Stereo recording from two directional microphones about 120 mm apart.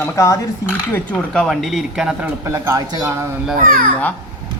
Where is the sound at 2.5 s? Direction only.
25° right (ahead or behind).